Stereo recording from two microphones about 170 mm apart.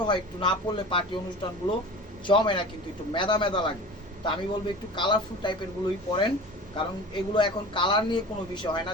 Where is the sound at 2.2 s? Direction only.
30° left (ahead or behind).